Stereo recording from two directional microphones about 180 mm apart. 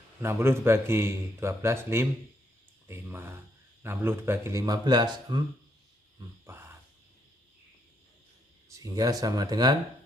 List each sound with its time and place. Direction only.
0.2 s a man's voice: 15° right (ahead or behind)
6.4 s a sound: 15° right (ahead or behind)
8.7 s a man's voice: 20° right (ahead or behind)